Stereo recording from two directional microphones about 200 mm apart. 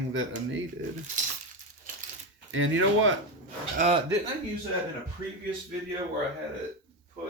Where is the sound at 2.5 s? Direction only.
75° right (ahead or behind).